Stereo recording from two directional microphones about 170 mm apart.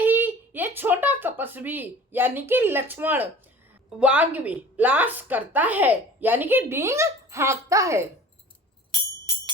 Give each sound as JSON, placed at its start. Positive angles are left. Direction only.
{"t": 0.0, "sound": "a woman's voice", "side_deg": -10}